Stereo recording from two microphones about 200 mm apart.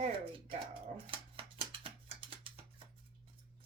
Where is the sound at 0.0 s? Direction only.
25° right (ahead or behind).